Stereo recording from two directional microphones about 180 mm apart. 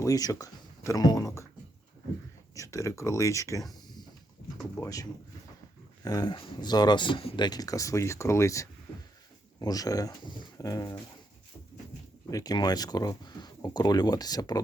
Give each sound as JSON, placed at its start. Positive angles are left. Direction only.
{"t": 0.0, "sound": "speech", "side_deg": 20}
{"t": 2.6, "sound": "speech", "side_deg": 15}
{"t": 4.8, "sound": "speech", "side_deg": 20}
{"t": 6.1, "sound": "speech", "side_deg": 20}
{"t": 12.3, "sound": "speech", "side_deg": 20}